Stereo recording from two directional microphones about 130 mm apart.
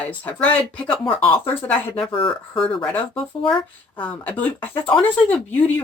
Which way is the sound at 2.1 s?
45° left (ahead or behind).